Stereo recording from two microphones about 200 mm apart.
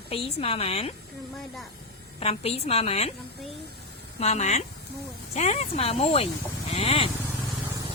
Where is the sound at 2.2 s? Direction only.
30° left (ahead or behind).